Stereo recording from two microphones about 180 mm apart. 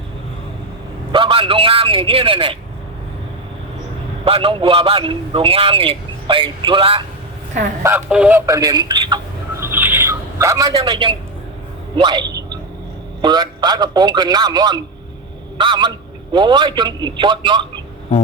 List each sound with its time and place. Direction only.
1.1 s a man's voice: 30° right (ahead or behind)
4.3 s a man's voice: 30° right (ahead or behind)
7.9 s speech: 10° right (ahead or behind); by 9.6 s 25° right (ahead or behind)
9.6 s a sound: 10° right (ahead or behind); by 11.2 s 25° right (ahead or behind)
11.9 s a man's voice: 25° right (ahead or behind)